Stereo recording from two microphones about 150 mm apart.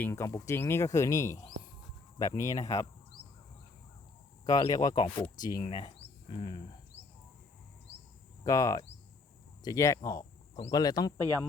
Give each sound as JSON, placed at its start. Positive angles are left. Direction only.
{"t": 0.0, "sound": "speech", "side_deg": 20}
{"t": 4.4, "sound": "speech", "side_deg": 25}
{"t": 8.4, "sound": "speech", "side_deg": 20}